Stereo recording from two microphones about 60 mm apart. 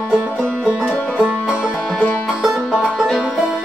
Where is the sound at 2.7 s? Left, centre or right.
Right.